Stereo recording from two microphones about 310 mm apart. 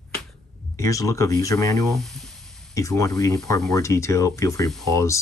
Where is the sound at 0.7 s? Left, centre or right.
Centre.